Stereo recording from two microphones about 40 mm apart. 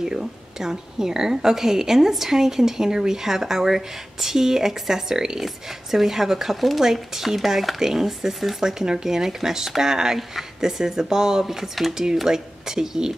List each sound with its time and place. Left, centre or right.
0.0 s speech: centre
11.4 s speech: centre